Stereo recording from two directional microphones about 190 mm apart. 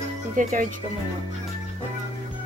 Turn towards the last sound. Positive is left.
turn(degrees=-40)  # may be behind; listen again after turning